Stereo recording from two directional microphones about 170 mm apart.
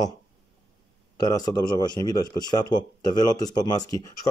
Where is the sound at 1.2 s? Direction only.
20° left (ahead or behind).